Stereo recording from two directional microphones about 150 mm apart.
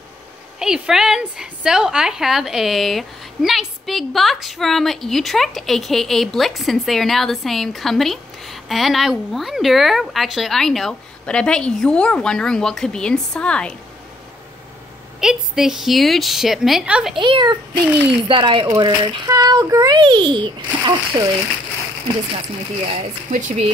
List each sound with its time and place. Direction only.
0.6 s a woman's voice: 5° right (ahead or behind)
15.1 s a woman's voice: 5° right (ahead or behind)
17.2 s a child's voice: 30° right (ahead or behind)
23.3 s speech: 55° right (ahead or behind)